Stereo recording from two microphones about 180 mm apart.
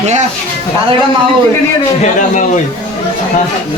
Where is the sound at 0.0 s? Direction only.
40° right (ahead or behind).